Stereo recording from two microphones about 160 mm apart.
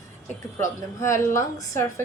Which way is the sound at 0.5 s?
20° left (ahead or behind).